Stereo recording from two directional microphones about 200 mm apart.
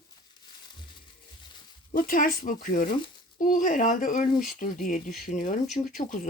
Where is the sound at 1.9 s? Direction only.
45° left (ahead or behind).